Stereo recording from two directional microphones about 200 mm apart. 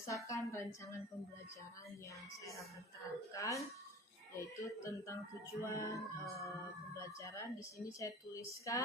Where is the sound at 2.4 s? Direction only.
15° left (ahead or behind).